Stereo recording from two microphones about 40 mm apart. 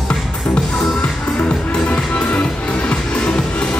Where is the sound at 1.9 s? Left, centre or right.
Left.